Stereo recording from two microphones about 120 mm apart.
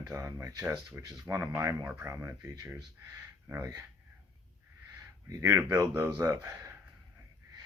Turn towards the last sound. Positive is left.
turn(degrees=-25)  # may be behind; listen again after turning